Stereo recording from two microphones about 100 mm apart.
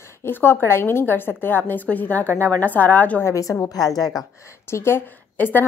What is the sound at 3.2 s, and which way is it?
Speech, 30° left (ahead or behind).